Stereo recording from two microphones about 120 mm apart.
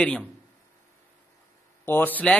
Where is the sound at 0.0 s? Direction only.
10° left (ahead or behind).